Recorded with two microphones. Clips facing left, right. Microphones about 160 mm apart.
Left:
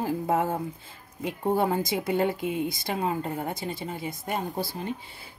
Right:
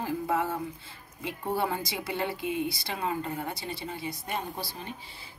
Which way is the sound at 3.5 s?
50° left (ahead or behind).